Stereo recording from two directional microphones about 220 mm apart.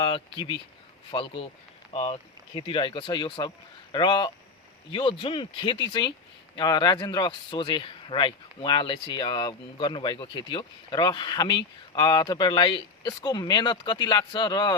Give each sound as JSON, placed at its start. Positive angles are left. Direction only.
{"t": 0.0, "sound": "a man's voice", "side_deg": 20}